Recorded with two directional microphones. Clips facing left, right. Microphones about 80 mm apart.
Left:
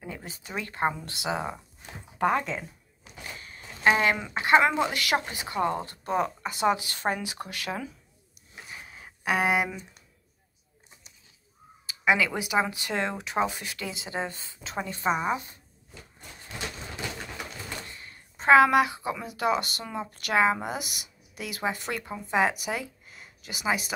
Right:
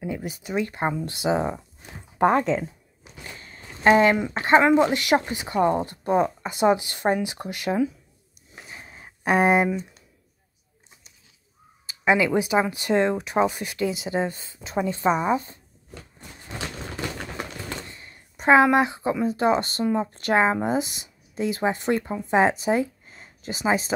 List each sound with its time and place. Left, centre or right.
0.0 s speech: centre
2.1 s speech: right
3.3 s a sound: right
4.4 s speech: right
8.6 s a sound: right
11.8 s crow: right
12.3 s speech: right
15.0 s a woman's voice: centre
17.8 s a sound: right
19.2 s speech: right